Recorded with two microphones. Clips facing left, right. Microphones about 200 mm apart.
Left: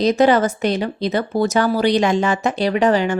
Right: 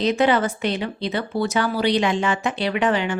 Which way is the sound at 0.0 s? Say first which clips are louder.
Left 4 dB; 40° left (ahead or behind).